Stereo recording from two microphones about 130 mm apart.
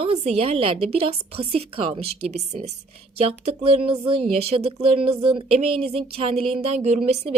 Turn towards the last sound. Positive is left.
turn(degrees=-55)  # may be behind; listen again after turning